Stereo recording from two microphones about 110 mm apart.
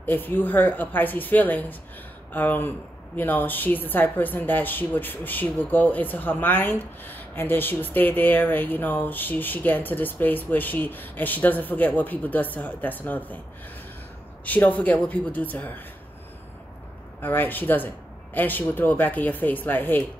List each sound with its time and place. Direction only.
0.0 s a woman's voice: 15° left (ahead or behind)
14.4 s a woman's voice: 15° left (ahead or behind)
17.2 s a woman's voice: 20° left (ahead or behind)